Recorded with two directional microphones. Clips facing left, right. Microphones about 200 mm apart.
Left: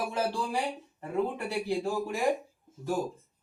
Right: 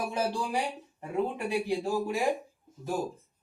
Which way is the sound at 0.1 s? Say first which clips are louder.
Even; 15° right (ahead or behind).